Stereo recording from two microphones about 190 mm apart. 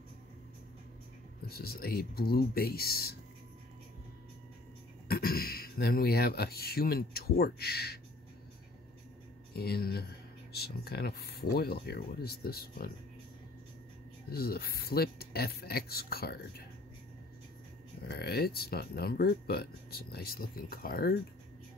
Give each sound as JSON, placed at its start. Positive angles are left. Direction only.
{"t": 1.5, "sound": "speech", "side_deg": 55}
{"t": 5.0, "sound": "speech", "side_deg": 50}
{"t": 9.5, "sound": "speech", "side_deg": 55}
{"t": 14.3, "sound": "speech", "side_deg": 55}
{"t": 18.0, "sound": "speech", "side_deg": 55}